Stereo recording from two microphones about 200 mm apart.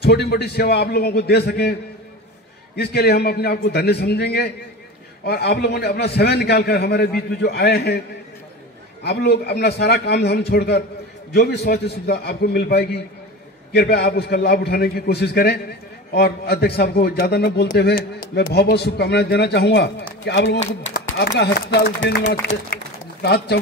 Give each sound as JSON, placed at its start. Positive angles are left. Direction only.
{"t": 0.0, "sound": "a man's voice", "side_deg": 55}
{"t": 9.0, "sound": "a man's voice", "side_deg": 55}